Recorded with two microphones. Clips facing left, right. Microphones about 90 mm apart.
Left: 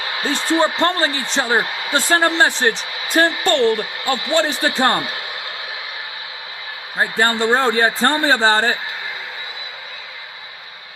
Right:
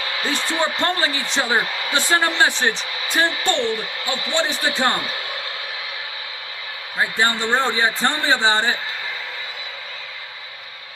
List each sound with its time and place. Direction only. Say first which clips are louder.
0.2 s speech: left 6 dB; 35° left (ahead or behind)
7.0 s speech: left 3 dB; 40° left (ahead or behind)